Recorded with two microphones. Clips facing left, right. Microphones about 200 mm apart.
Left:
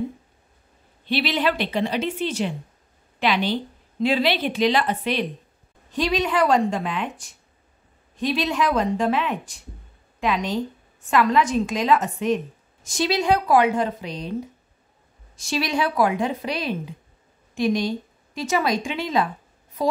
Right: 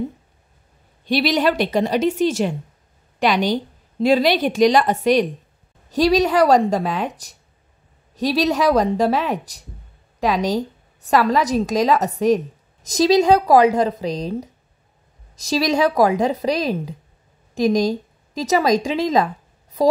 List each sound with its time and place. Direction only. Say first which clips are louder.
1.0 s a woman's voice: right 5 dB; 45° right (ahead or behind)